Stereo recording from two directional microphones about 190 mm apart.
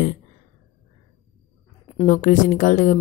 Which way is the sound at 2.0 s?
40° left (ahead or behind).